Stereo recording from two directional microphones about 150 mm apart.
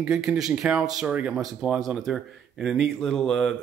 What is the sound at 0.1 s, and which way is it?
A man's voice, 5° right (ahead or behind).